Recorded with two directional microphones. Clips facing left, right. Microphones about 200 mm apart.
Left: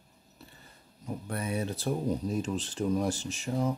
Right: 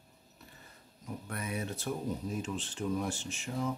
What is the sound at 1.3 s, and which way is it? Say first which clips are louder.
Speech: left 5 dB; 30° left (ahead or behind).